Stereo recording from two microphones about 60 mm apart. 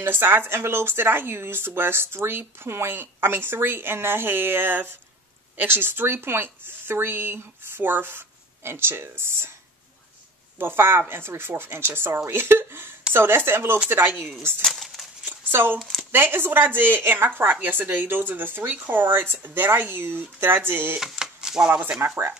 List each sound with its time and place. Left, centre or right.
0.0 s speech: right
10.8 s speech: right
14.6 s a sound: centre
15.2 s a sound: right
15.8 s speech: centre
16.1 s speech: right
21.0 s a sound: centre
21.6 s speech: right
22.0 s speech: right